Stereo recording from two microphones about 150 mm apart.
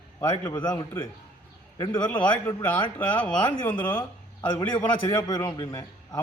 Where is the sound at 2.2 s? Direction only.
10° left (ahead or behind).